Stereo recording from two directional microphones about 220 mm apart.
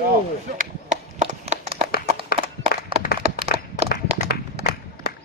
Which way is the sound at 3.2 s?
30° right (ahead or behind).